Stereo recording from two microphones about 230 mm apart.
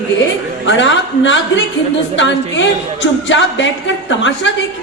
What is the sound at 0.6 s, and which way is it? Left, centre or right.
A woman's voice, left.